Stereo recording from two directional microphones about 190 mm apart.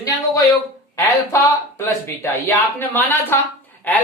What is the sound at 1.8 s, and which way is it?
Speech, 15° left (ahead or behind).